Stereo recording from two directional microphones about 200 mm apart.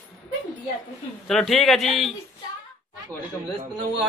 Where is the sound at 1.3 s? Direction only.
Centre (ahead or behind).